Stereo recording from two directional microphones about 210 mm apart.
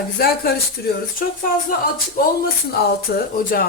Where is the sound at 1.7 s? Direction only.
45° left (ahead or behind).